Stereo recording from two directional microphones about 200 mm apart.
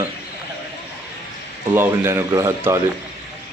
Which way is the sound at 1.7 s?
10° right (ahead or behind).